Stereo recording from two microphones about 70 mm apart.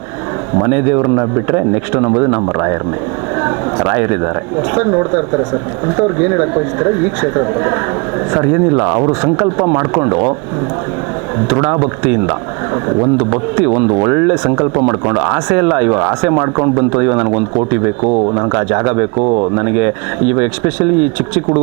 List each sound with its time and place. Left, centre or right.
0.5 s a man's voice: right
3.4 s a sound: right
4.7 s a man's voice: right
11.3 s a man's voice: right